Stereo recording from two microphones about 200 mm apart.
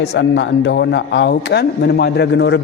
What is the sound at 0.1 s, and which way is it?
A man's voice, 65° left (ahead or behind).